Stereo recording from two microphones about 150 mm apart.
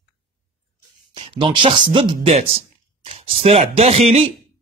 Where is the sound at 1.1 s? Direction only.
35° right (ahead or behind).